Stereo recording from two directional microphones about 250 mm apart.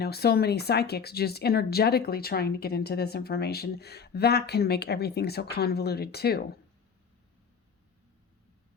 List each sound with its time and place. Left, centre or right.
0.0 s speech: left